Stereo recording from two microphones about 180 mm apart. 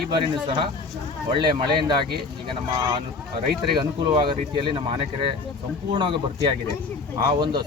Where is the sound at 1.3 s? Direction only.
25° right (ahead or behind).